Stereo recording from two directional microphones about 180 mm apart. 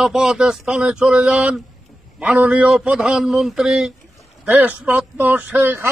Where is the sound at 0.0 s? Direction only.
5° right (ahead or behind).